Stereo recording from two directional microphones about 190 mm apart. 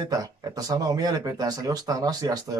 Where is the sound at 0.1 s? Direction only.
20° right (ahead or behind).